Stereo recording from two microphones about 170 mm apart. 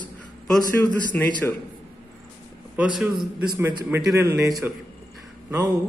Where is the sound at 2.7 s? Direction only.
5° right (ahead or behind).